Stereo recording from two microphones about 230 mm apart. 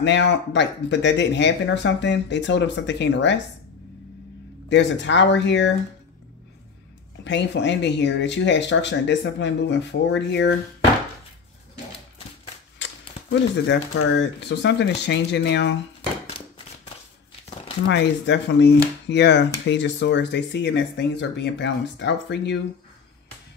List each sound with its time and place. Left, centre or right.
0.0 s speech: left
4.6 s speech: left
7.2 s speech: left
12.7 s a sound: left
14.1 s speech: left
17.8 s speech: left